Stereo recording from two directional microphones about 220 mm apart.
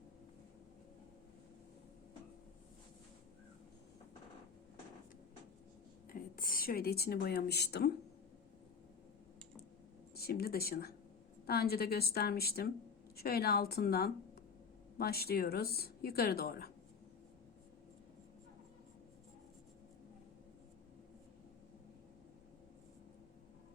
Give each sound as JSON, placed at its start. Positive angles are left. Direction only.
{"t": 6.1, "sound": "speech", "side_deg": 40}
{"t": 10.2, "sound": "a woman's voice", "side_deg": 45}